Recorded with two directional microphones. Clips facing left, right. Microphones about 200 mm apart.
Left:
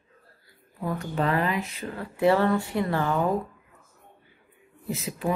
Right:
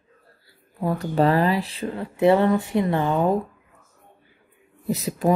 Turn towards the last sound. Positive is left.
turn(degrees=-40)  # may be behind; listen again after turning